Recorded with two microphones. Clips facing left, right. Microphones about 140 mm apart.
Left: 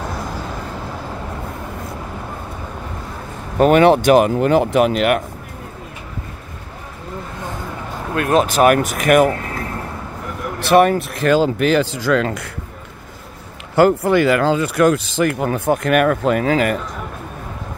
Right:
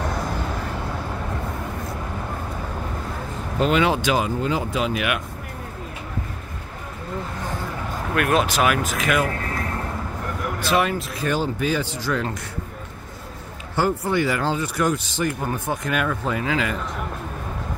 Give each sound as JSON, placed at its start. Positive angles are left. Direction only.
{"t": 3.5, "sound": "speech", "side_deg": 55}
{"t": 8.1, "sound": "speech", "side_deg": 30}
{"t": 8.6, "sound": "speech", "side_deg": 60}
{"t": 10.6, "sound": "speech", "side_deg": 60}
{"t": 13.7, "sound": "speech", "side_deg": 70}